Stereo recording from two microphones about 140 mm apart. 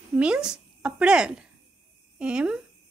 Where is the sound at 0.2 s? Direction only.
5° right (ahead or behind).